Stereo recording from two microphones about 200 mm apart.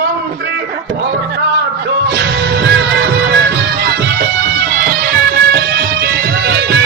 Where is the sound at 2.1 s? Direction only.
55° right (ahead or behind).